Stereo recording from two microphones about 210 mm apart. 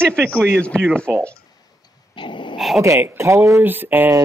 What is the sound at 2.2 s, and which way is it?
Dog, 20° left (ahead or behind).